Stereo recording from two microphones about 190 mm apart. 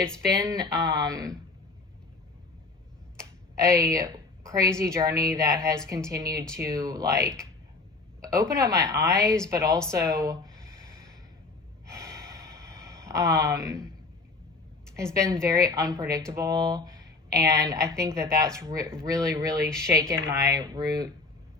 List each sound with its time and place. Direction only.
0.3 s speech: 20° right (ahead or behind)
3.5 s a woman's voice: 15° right (ahead or behind)
11.9 s gasp: 15° right (ahead or behind)
14.9 s speech: 15° right (ahead or behind)